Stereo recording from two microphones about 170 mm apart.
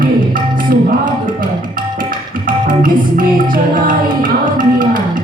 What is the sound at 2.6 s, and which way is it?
Music, 55° right (ahead or behind).